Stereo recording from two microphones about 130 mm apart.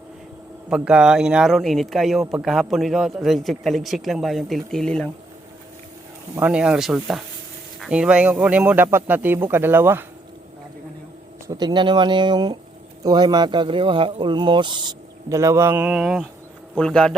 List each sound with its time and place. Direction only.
0.7 s a man's voice: 5° right (ahead or behind)
6.3 s speech: 10° right (ahead or behind)
11.4 s speech: 30° right (ahead or behind)
15.3 s a man's voice: 25° right (ahead or behind)
15.8 s a man's voice: 5° right (ahead or behind)